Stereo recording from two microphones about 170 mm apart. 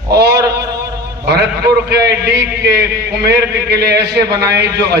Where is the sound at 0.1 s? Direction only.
80° right.